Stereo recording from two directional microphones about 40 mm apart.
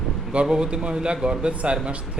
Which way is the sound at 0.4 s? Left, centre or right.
Right.